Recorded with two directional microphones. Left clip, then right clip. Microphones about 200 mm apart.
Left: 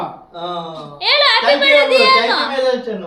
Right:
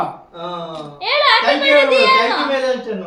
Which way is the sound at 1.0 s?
35° left (ahead or behind).